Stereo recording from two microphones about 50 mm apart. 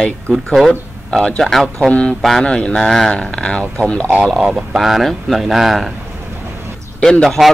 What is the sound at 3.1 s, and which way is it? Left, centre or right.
Speech, centre.